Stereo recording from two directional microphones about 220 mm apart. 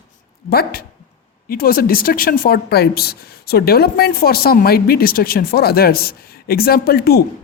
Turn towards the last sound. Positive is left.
turn(degrees=45)  # may be behind; listen again after turning